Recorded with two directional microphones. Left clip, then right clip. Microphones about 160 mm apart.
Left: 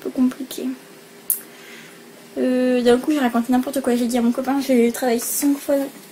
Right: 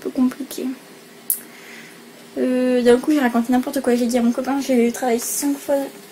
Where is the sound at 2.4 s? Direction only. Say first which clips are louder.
Even; 5° right (ahead or behind).